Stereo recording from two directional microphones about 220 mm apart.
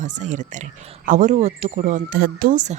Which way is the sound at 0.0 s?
35° right (ahead or behind).